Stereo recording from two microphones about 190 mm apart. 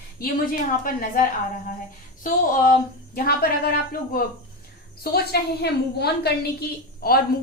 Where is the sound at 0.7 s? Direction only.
45° left (ahead or behind).